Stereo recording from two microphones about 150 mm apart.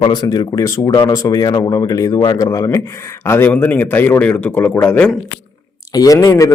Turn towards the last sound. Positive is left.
turn(degrees=20)  # may be behind; listen again after turning